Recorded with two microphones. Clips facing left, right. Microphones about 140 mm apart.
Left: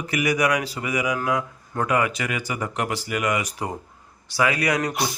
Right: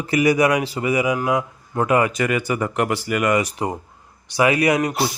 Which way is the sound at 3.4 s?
25° right (ahead or behind).